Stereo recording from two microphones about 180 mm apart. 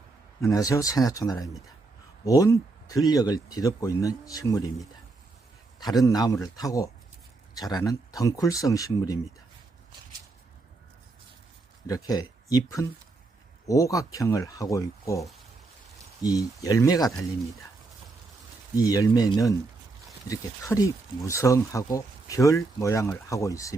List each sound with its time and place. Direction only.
0.4 s speech: 20° left (ahead or behind)
6.1 s speech: 20° left (ahead or behind)
11.9 s speech: 20° left (ahead or behind)
18.8 s speech: 20° left (ahead or behind)